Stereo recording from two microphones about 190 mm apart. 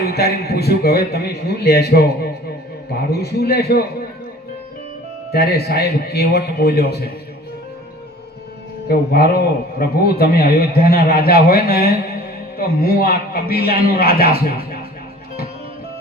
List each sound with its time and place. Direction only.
0.1 s a man's voice: 55° left (ahead or behind)
5.3 s a man's voice: 55° left (ahead or behind)
8.9 s a man's voice: 55° left (ahead or behind)